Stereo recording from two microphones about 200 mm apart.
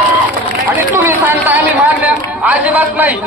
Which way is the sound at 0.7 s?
10° right (ahead or behind).